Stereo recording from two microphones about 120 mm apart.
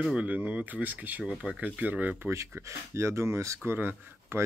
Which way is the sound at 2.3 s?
25° right (ahead or behind).